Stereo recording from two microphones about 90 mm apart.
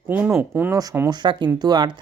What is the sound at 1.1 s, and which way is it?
Speech, 55° right (ahead or behind).